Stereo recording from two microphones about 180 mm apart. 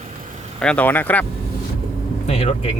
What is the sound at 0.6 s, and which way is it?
Speech, 10° left (ahead or behind).